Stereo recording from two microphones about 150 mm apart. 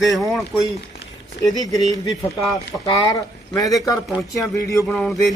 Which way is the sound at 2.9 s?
25° left (ahead or behind).